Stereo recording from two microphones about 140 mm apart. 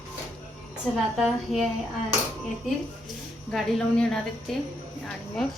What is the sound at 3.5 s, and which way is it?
Speech, centre (ahead or behind).